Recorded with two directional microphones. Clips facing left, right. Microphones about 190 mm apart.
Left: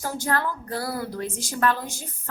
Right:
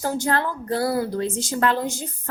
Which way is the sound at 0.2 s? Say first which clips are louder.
Right 3 dB; 25° right (ahead or behind).